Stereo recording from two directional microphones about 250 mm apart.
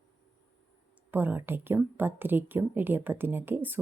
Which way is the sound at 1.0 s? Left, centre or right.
Centre.